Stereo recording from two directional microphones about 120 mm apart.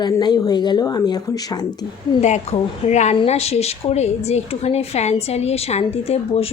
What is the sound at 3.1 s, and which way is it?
A woman's voice, 55° left (ahead or behind).